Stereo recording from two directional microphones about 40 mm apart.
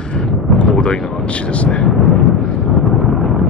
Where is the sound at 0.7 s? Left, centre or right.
Left.